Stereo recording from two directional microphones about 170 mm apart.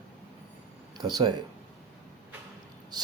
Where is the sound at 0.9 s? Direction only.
25° right (ahead or behind).